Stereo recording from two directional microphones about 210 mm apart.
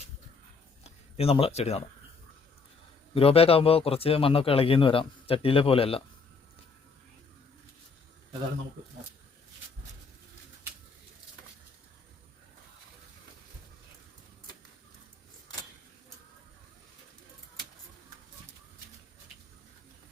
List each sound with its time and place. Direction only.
0.9 s speech: 30° left (ahead or behind)
3.2 s a man's voice: 30° left (ahead or behind)